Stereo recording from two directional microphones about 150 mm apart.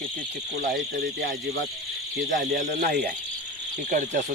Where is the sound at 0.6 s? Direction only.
90° right.